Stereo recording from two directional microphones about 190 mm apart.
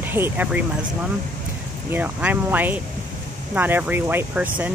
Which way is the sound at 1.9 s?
10° right (ahead or behind).